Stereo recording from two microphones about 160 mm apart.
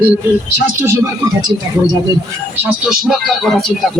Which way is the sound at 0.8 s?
15° right (ahead or behind).